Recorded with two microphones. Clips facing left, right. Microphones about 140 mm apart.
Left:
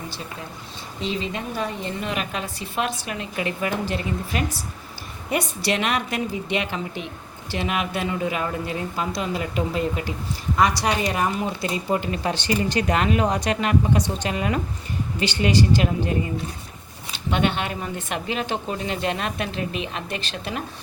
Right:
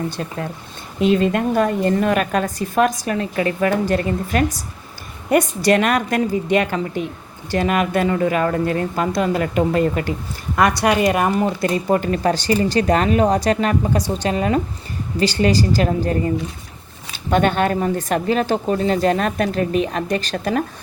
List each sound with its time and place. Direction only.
0.1 s speech: 60° right (ahead or behind)